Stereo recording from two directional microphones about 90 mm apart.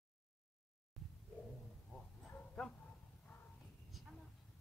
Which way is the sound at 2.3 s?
10° left (ahead or behind).